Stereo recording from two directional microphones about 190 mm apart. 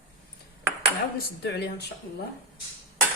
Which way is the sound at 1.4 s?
60° left (ahead or behind).